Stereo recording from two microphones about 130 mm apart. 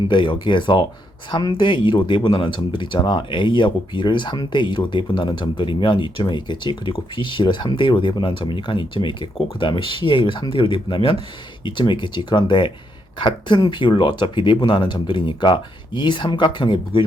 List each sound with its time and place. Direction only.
0.1 s speech: 40° left (ahead or behind)